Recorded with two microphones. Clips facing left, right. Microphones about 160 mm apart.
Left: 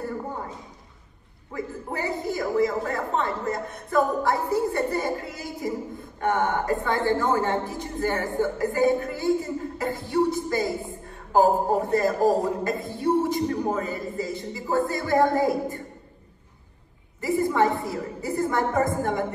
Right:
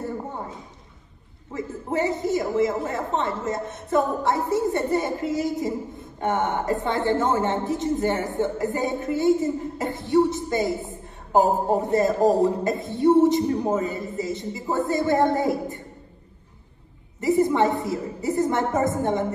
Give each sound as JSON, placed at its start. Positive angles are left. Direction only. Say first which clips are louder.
{"t": 1.5, "sound": "a man's voice", "louder": "right 4 dB", "side_deg": -20}
{"t": 17.2, "sound": "a man's voice", "louder": "right 3 dB", "side_deg": -20}